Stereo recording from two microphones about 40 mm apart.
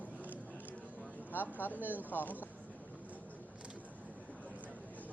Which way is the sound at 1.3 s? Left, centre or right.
Left.